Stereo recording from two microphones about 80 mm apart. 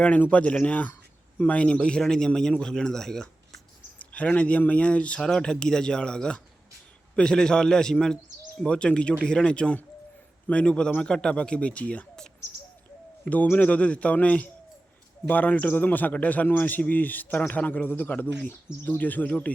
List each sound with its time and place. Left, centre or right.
0.0 s a man's voice: centre
4.1 s a man's voice: centre